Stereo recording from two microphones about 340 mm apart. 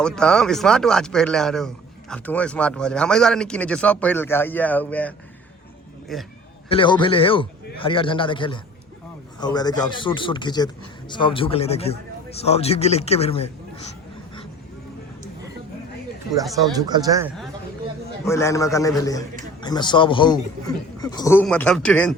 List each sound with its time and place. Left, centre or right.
0.0 s a man's voice: centre
6.7 s a man's voice: centre
16.7 s speech: centre
18.3 s a man's voice: centre